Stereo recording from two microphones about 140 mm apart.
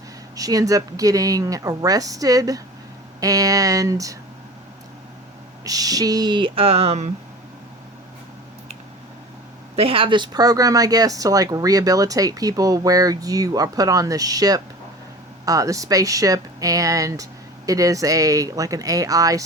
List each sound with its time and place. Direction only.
0.3 s speech: 25° right (ahead or behind)
5.6 s speech: 25° right (ahead or behind); by 7.1 s 50° right (ahead or behind)
9.7 s speech: 45° right (ahead or behind); by 19.5 s 25° right (ahead or behind)